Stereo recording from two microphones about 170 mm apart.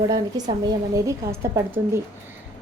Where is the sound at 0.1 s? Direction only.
25° right (ahead or behind).